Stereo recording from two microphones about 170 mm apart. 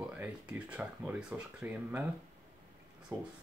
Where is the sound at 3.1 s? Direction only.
25° right (ahead or behind).